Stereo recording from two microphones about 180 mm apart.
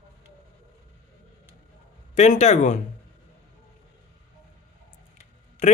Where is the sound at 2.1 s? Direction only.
40° left (ahead or behind).